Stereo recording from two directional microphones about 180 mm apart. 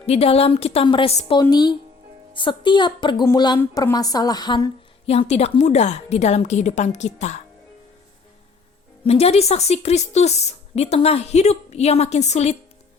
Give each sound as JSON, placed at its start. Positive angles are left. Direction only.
{"t": 0.0, "sound": "a woman's voice", "side_deg": 35}
{"t": 1.4, "sound": "a woman's voice", "side_deg": 25}
{"t": 9.0, "sound": "a woman's voice", "side_deg": 35}